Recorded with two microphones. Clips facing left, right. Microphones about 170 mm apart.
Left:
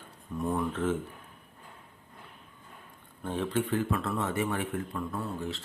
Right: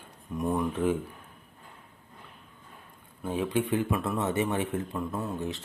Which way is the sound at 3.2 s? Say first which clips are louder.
Right 2 dB; 10° right (ahead or behind).